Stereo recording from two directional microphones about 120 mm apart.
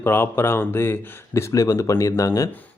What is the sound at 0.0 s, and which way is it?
Speech, 20° left (ahead or behind).